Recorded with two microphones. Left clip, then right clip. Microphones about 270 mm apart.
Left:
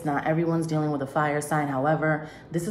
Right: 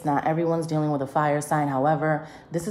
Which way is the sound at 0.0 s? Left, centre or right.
Right.